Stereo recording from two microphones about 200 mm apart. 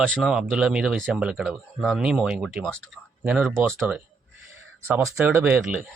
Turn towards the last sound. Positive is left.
turn(degrees=-10)  # may be behind; listen again after turning